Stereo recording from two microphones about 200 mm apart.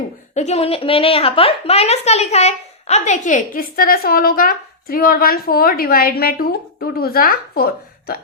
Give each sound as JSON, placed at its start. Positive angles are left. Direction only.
{"t": 0.3, "sound": "a woman's voice", "side_deg": 30}